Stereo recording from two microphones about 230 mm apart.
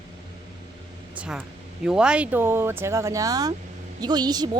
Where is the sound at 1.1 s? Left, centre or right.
Centre.